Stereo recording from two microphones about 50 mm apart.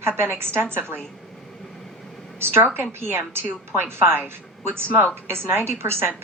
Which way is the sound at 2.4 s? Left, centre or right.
Right.